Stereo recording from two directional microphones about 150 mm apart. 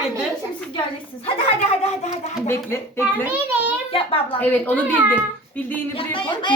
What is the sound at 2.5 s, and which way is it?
Speech, 15° left (ahead or behind).